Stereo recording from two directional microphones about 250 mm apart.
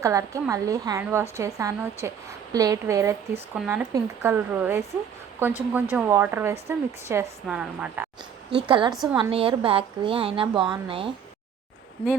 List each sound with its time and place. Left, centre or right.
0.0 s a woman's voice: centre
8.4 s a woman's voice: centre